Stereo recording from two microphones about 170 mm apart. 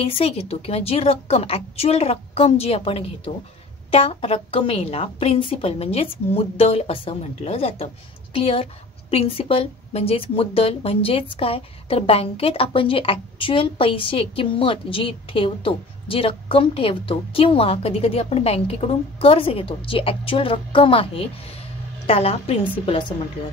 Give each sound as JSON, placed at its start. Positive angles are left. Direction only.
{"t": 0.0, "sound": "a woman's voice", "side_deg": 35}